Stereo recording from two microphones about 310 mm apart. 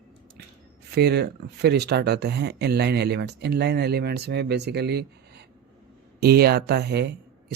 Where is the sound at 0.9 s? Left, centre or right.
Right.